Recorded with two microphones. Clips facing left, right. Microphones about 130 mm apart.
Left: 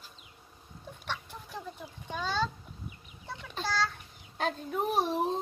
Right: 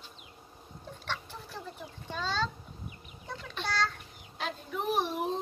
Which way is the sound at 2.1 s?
10° left (ahead or behind).